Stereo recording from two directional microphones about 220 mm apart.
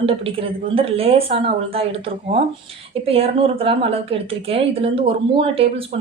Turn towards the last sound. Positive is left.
turn(degrees=-25)  # may be behind; listen again after turning